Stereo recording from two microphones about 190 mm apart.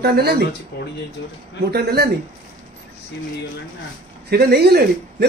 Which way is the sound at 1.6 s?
55° right (ahead or behind).